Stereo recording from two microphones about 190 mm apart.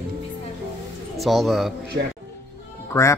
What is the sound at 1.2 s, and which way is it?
Speech, centre (ahead or behind).